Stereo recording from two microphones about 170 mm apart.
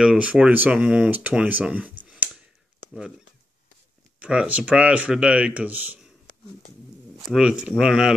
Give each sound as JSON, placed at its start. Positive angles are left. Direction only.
{"t": 0.0, "sound": "speech", "side_deg": -5}
{"t": 4.2, "sound": "speech", "side_deg": -5}
{"t": 7.3, "sound": "speech", "side_deg": -5}